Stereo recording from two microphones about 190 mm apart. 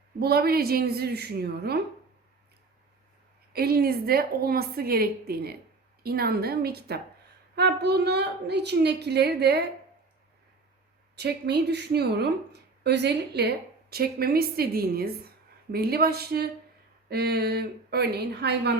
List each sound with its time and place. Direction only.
0.2 s a woman's voice: 55° right (ahead or behind)
3.5 s a woman's voice: 55° right (ahead or behind)
11.2 s a woman's voice: 60° right (ahead or behind)